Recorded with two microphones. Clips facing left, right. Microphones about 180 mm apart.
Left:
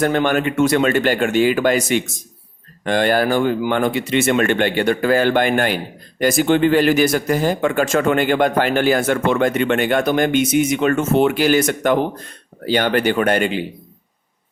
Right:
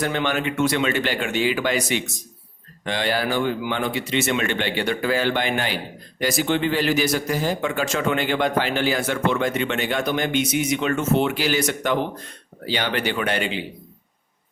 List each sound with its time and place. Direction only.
0.0 s speech: 50° left (ahead or behind)